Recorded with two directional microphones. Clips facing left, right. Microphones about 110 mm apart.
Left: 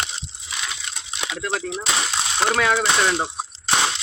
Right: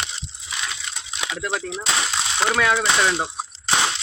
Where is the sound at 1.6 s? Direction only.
5° left (ahead or behind).